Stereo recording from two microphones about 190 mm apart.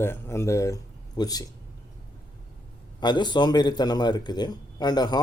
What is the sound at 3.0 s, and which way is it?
A man's voice, 20° left (ahead or behind).